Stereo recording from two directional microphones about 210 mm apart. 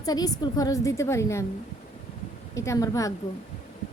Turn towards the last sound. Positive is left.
turn(degrees=15)  # may be behind; listen again after turning